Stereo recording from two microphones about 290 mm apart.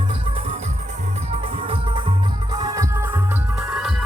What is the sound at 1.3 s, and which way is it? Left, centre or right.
Music, centre.